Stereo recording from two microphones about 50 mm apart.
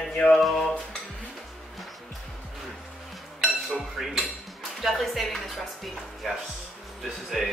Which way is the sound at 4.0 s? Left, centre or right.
Centre.